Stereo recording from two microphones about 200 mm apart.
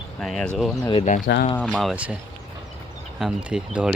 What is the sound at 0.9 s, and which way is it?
Speech, 35° left (ahead or behind).